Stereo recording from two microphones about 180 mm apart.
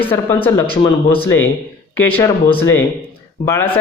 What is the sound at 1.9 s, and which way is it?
Speech, 10° left (ahead or behind).